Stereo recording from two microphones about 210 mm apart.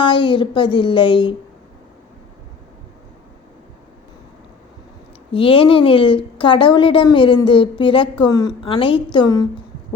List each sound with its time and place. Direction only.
0.0 s a woman's voice: 25° left (ahead or behind)
5.3 s a woman's voice: 25° left (ahead or behind)